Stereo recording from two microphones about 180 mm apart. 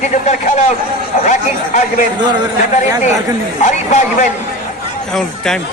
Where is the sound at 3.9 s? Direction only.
40° left (ahead or behind).